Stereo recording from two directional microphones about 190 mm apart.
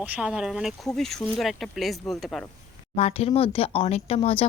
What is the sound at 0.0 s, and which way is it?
Speech, 5° right (ahead or behind).